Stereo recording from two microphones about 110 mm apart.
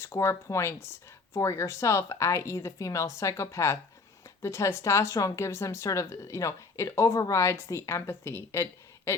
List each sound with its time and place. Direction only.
0.0 s speech: 25° left (ahead or behind)